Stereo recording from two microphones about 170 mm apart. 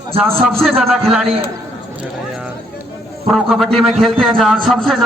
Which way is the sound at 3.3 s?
Centre (ahead or behind).